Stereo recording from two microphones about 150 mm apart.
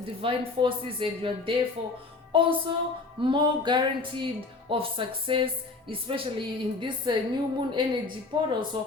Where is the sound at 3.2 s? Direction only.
30° right (ahead or behind).